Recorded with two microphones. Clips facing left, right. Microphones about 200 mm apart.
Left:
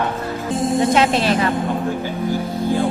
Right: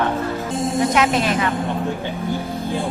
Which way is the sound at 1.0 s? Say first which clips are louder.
Left 2 dB; 30° left (ahead or behind).